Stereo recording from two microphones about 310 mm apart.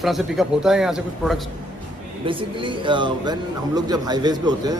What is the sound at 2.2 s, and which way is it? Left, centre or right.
Speech, centre.